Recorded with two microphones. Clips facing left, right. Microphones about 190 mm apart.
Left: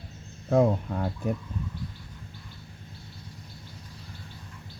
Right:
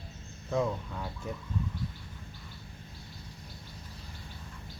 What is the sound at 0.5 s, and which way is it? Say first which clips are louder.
Speech: left 8 dB; 50° left (ahead or behind).